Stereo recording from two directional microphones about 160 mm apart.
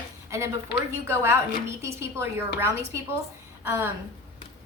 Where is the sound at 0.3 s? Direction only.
15° right (ahead or behind).